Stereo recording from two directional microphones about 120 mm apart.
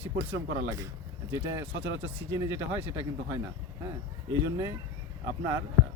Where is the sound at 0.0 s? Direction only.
20° right (ahead or behind).